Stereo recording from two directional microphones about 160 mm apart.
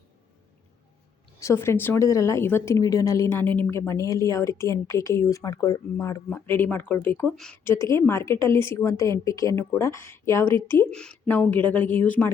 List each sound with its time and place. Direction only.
1.4 s speech: 15° left (ahead or behind)